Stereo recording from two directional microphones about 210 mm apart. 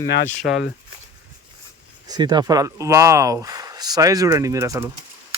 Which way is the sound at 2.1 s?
20° right (ahead or behind).